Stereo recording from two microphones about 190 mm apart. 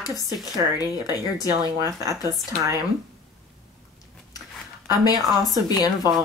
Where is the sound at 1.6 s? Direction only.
20° right (ahead or behind).